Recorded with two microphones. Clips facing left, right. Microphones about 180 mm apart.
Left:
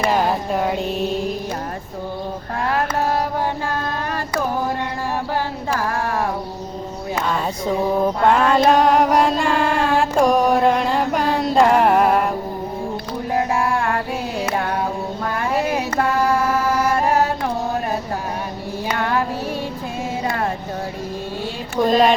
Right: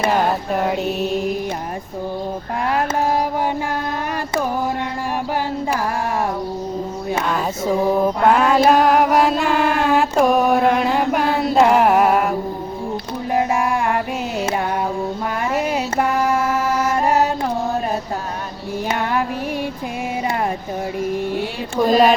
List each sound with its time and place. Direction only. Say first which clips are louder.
0.5 s music: right 1 dB; 5° right (ahead or behind)
7.3 s mantra: even; 5° right (ahead or behind)
13.3 s a sound: right 1 dB; 15° right (ahead or behind)
15.6 s music: even; 15° right (ahead or behind)
21.8 s music: right 1 dB; centre (ahead or behind)